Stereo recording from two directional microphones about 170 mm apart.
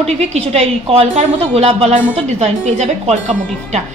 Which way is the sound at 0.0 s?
40° right (ahead or behind).